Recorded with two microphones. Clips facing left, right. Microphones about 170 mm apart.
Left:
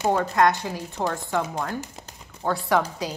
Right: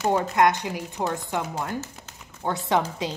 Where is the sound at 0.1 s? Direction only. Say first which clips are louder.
Even; 20° right (ahead or behind).